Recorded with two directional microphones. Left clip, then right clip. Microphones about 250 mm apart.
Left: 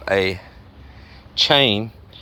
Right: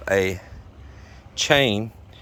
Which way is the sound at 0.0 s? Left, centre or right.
Centre.